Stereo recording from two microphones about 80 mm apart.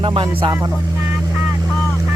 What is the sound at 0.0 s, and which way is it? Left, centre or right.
Speech, right.